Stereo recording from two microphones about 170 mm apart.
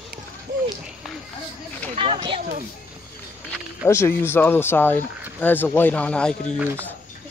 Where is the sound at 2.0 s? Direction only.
30° right (ahead or behind).